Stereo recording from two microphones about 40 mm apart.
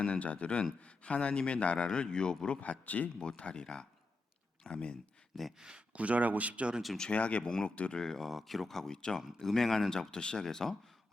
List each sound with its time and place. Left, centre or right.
0.0 s a man's voice: left
2.6 s a man's voice: left
3.2 s speech: left
5.5 s speech: right
5.9 s speech: right
7.1 s a man's voice: left
7.4 s speech: centre
8.2 s speech: centre